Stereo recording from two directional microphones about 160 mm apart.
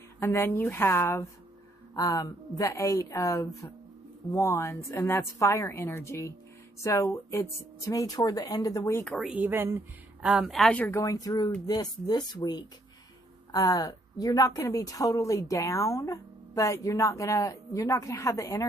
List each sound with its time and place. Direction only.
0.2 s a woman's voice: 15° left (ahead or behind)
9.0 s speech: centre (ahead or behind)
11.0 s a woman's voice: 20° left (ahead or behind)